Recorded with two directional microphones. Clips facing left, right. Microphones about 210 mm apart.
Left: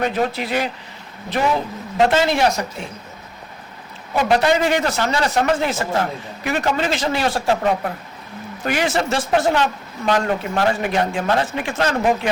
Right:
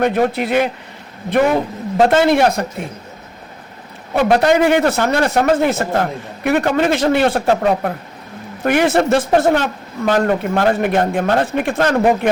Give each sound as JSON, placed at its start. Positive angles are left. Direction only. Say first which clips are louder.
{"t": 0.0, "sound": "a man's voice", "louder": "right 5 dB", "side_deg": -55}
{"t": 2.0, "sound": "a man's voice", "louder": "right 4 dB", "side_deg": -50}
{"t": 4.1, "sound": "a man's voice", "louder": "right 4 dB", "side_deg": -60}
{"t": 8.6, "sound": "a man's voice", "louder": "right 7 dB", "side_deg": -55}